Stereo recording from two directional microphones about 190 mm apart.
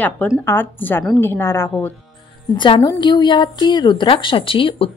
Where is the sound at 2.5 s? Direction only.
25° left (ahead or behind).